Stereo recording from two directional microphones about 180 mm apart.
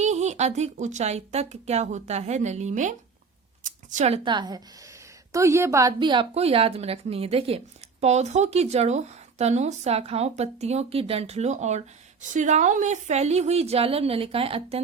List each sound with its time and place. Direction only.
0.0 s a woman's voice: 40° right (ahead or behind); by 5.9 s 15° right (ahead or behind)
6.0 s speech: 25° right (ahead or behind)